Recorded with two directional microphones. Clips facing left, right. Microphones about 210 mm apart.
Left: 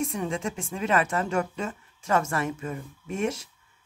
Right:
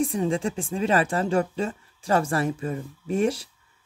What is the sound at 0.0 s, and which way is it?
Speech, 30° right (ahead or behind).